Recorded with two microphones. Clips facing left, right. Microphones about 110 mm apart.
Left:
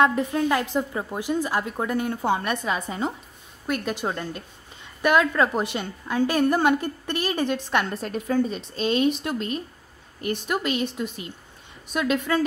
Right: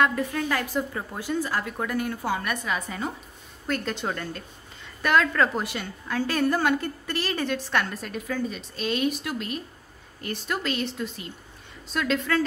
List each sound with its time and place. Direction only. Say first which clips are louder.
0.0 s a woman's voice: left 4 dB; 20° left (ahead or behind)
3.6 s a woman's voice: left 2 dB; 15° left (ahead or behind)